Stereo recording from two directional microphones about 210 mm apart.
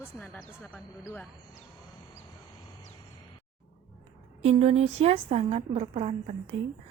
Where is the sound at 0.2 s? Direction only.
5° left (ahead or behind).